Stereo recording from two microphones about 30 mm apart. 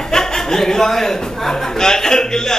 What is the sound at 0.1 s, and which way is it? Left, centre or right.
A man's voice, centre.